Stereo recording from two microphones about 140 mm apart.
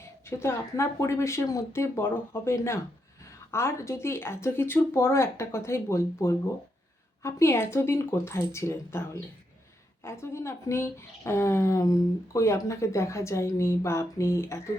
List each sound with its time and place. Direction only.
0.3 s a woman's voice: 20° left (ahead or behind)